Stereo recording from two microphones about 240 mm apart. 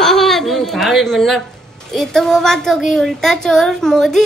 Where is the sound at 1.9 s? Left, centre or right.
Centre.